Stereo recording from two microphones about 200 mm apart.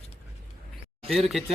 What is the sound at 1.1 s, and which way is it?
Speech, centre (ahead or behind).